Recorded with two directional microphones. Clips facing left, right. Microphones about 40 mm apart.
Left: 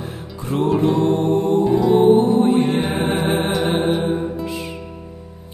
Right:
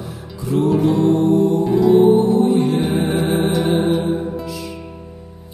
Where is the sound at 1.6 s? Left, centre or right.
Centre.